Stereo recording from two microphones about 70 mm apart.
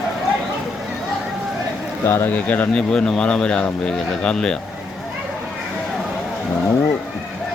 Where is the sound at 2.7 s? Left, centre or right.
Centre.